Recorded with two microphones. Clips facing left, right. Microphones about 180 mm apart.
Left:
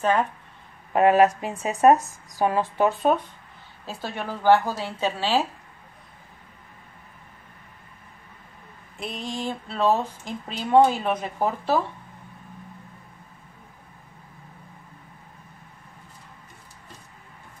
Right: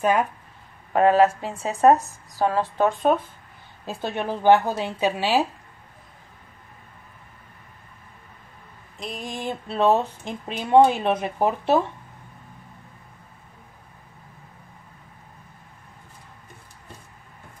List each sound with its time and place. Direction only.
0.0 s speech: 10° right (ahead or behind)
0.9 s speech: 15° left (ahead or behind)
3.1 s speech: centre (ahead or behind)
3.8 s speech: 20° right (ahead or behind)
9.2 s speech: 15° right (ahead or behind)